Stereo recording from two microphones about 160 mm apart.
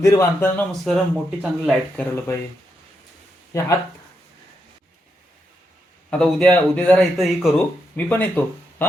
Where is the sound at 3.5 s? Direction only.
20° left (ahead or behind).